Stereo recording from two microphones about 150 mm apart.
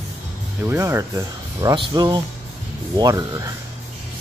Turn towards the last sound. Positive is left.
turn(degrees=-25)  # may be behind; listen again after turning